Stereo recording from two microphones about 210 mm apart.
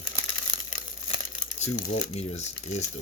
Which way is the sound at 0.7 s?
30° left (ahead or behind).